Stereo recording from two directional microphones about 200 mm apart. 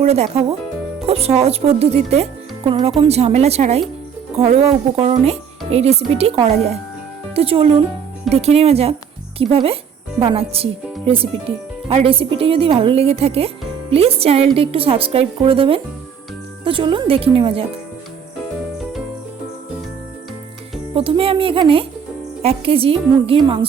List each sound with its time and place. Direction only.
0.0 s speech: 30° right (ahead or behind)
20.9 s speech: 25° right (ahead or behind)